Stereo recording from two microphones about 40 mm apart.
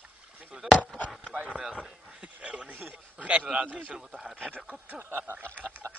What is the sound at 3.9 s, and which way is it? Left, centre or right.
Speech, centre.